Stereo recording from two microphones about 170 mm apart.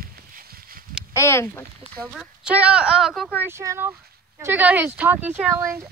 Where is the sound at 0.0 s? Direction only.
60° right (ahead or behind).